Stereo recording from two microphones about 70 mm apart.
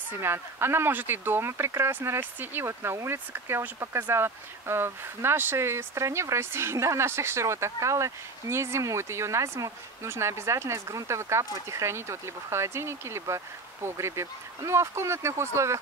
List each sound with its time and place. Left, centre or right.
0.2 s speech: right